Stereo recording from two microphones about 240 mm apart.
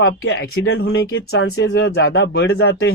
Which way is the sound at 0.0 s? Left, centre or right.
Left.